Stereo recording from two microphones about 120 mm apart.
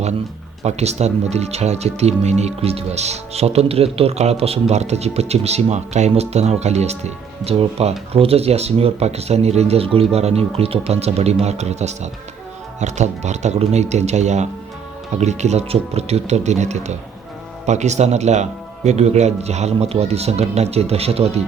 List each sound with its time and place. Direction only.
0.6 s speech: 65° right (ahead or behind)